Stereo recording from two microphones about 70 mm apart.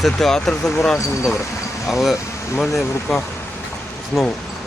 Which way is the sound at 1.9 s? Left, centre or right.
Centre.